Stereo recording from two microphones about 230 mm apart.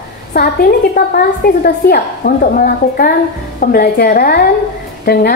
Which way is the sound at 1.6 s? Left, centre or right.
Left.